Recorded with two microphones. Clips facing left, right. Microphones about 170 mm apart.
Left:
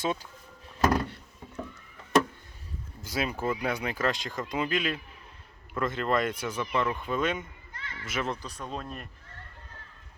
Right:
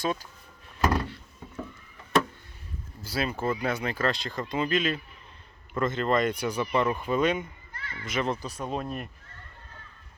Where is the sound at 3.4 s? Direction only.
15° left (ahead or behind).